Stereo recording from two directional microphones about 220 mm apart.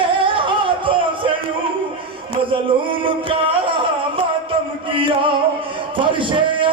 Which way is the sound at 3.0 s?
25° right (ahead or behind).